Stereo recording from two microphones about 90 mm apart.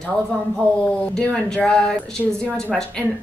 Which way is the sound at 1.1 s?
10° left (ahead or behind).